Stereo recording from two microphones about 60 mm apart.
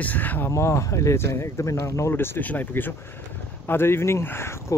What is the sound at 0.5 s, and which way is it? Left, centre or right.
Speech, left.